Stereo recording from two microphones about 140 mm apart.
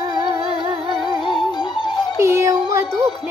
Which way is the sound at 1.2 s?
30° left (ahead or behind).